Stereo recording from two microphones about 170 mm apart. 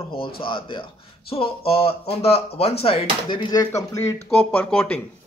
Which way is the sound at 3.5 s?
20° left (ahead or behind).